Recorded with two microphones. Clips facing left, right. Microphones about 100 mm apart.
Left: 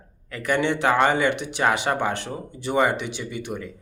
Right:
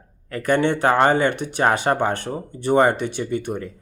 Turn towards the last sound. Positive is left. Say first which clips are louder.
# right 6 dB
turn(degrees=-45)  # may be behind; listen again after turning